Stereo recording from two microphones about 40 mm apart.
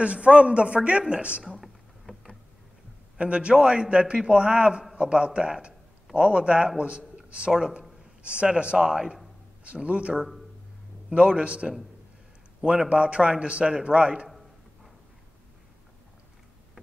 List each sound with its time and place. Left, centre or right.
0.0 s a man's voice: right
3.2 s a man's voice: right
8.2 s speech: right
8.7 s speech: centre
9.8 s a man's voice: right
12.9 s a man's voice: right